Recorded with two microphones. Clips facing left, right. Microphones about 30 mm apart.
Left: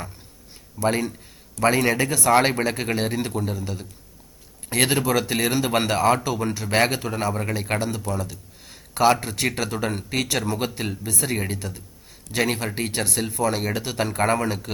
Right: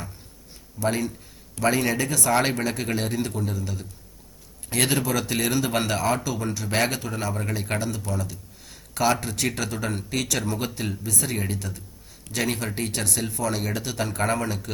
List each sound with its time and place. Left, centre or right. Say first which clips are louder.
0.8 s speech: left 3 dB; left
7.8 s speech: left 3 dB; left
8.2 s a sound: left 2 dB; left
9.2 s speech: left 2 dB; centre